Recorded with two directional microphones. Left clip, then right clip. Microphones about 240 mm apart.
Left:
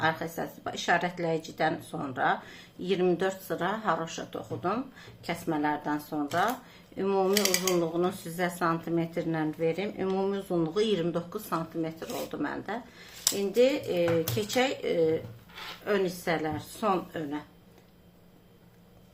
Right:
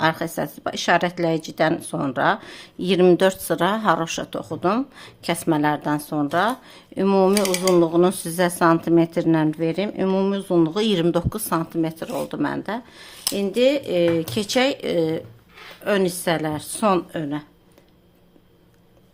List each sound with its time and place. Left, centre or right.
0.0 s speech: right